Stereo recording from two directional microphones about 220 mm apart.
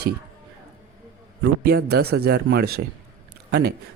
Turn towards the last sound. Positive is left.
turn(degrees=-45)  # may be behind; listen again after turning